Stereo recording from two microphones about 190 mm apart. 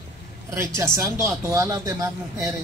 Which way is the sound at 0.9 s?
15° right (ahead or behind).